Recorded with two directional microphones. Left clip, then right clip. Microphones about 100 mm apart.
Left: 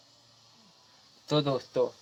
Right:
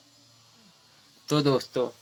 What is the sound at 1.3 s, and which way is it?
Speech, 15° right (ahead or behind).